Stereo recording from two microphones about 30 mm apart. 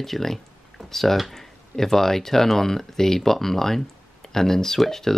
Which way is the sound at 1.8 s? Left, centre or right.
Centre.